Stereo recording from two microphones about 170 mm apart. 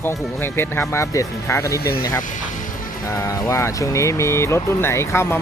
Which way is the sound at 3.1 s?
20° left (ahead or behind).